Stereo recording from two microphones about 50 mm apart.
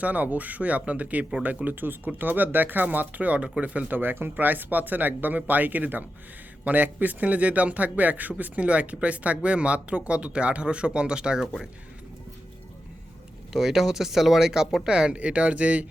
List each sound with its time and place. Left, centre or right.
0.0 s speech: right
3.9 s a man's voice: right; by 11.4 s centre
13.5 s a man's voice: centre; by 15.9 s right